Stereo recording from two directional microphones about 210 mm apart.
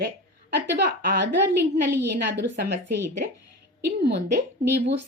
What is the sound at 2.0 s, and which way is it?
Speech, 55° right (ahead or behind).